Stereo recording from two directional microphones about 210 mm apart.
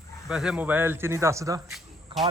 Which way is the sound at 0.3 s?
5° right (ahead or behind).